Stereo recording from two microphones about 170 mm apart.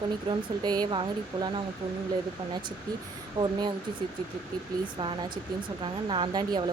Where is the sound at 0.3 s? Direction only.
25° right (ahead or behind).